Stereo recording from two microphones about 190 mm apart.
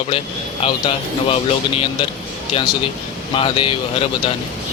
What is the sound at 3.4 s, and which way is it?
Speech, 25° left (ahead or behind).